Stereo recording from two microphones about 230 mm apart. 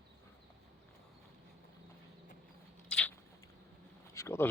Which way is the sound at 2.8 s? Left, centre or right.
Centre.